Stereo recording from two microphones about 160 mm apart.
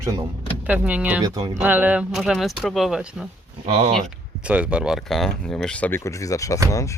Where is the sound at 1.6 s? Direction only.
10° right (ahead or behind).